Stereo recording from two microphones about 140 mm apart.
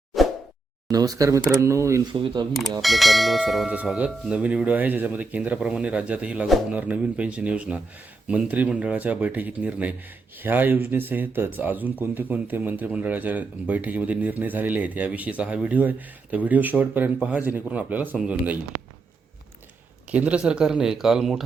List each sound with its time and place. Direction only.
0.1 s whack: centre (ahead or behind)
0.9 s speech: 25° right (ahead or behind)
2.1 s speech: 35° right (ahead or behind)
2.5 s speech: centre (ahead or behind)
20.1 s speech: 10° right (ahead or behind)